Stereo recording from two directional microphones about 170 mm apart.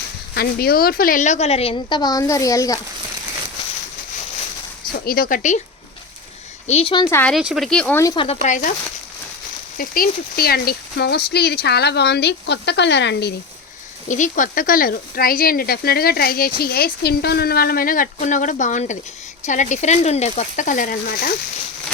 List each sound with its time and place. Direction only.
0.3 s a woman's voice: 65° left (ahead or behind); by 2.8 s 20° left (ahead or behind)
4.9 s speech: 60° left (ahead or behind)
6.7 s a woman's voice: 40° left (ahead or behind)
7.1 s speech: 10° left (ahead or behind)
7.3 s speech: centre (ahead or behind)
8.0 s speech: 30° left (ahead or behind)
8.4 s speech: 45° left (ahead or behind)
9.7 s speech: 55° left (ahead or behind); by 13.3 s 90° left
14.1 s speech: 50° left (ahead or behind)